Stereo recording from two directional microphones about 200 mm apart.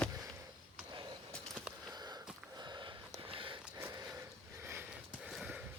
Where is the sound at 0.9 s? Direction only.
20° right (ahead or behind).